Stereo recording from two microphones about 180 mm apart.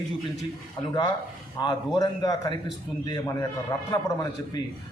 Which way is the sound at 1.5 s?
20° left (ahead or behind).